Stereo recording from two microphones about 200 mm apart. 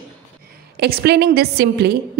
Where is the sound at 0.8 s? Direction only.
55° right (ahead or behind).